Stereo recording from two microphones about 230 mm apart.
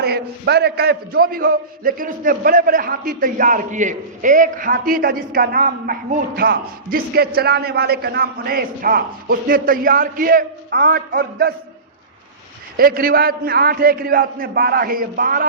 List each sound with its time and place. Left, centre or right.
0.0 s a man's voice: right
12.7 s a man's voice: right